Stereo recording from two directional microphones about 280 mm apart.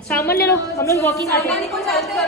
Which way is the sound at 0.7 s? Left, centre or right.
Centre.